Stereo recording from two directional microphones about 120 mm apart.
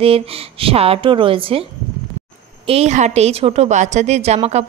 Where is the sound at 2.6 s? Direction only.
65° right (ahead or behind).